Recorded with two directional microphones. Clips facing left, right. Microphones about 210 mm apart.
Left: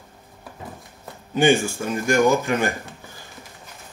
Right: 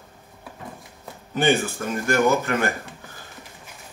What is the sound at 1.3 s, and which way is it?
Speech, 15° left (ahead or behind).